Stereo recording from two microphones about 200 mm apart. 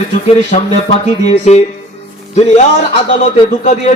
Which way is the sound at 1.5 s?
35° left (ahead or behind).